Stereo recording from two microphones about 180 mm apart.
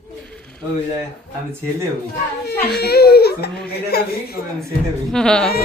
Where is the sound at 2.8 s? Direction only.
60° left (ahead or behind).